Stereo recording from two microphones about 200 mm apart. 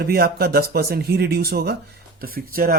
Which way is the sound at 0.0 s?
50° right (ahead or behind).